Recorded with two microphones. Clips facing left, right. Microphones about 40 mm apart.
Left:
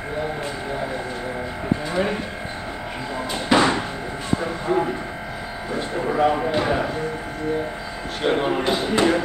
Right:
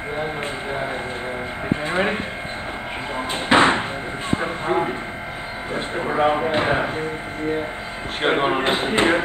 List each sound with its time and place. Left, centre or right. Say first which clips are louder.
0.2 s speech: even; right
8.2 s speech: right 2 dB; right